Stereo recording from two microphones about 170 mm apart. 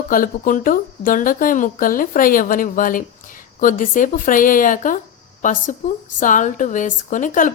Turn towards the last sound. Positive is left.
turn(degrees=50)  # may be behind; listen again after turning